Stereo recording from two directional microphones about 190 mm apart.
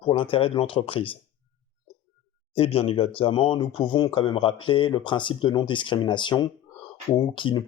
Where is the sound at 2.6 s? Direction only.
30° left (ahead or behind).